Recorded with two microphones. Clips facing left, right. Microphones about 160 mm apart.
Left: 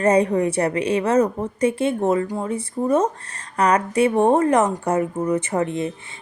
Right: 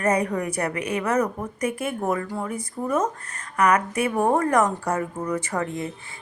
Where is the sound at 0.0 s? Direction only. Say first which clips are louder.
Left 6 dB; 30° left (ahead or behind).